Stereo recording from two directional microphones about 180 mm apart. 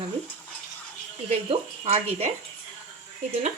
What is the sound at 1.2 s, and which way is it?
A woman's voice, 35° right (ahead or behind).